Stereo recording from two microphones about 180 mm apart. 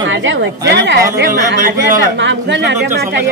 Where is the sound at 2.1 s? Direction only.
85° right.